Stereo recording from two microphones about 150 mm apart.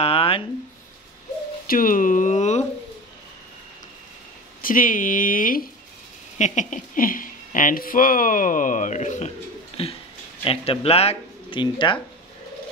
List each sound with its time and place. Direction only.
0.0 s a sound: 40° left (ahead or behind)
1.7 s speech: 65° left (ahead or behind)
4.6 s speech: 65° left (ahead or behind)
6.3 s speech: 55° left (ahead or behind)
9.7 s a sound: 40° left (ahead or behind)
10.4 s speech: 40° left (ahead or behind)
11.6 s speech: 30° left (ahead or behind)